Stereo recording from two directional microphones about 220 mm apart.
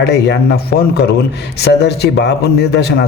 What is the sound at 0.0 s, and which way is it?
Speech, 50° left (ahead or behind).